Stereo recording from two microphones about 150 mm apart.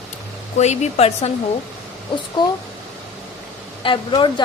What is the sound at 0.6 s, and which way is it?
Speech, 50° left (ahead or behind).